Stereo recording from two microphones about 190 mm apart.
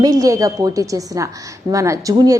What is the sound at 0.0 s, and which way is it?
A woman's voice, 20° right (ahead or behind).